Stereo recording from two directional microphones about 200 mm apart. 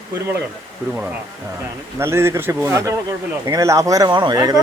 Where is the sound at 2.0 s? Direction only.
15° right (ahead or behind).